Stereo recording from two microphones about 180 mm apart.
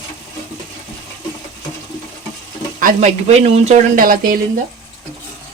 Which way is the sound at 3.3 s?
35° right (ahead or behind).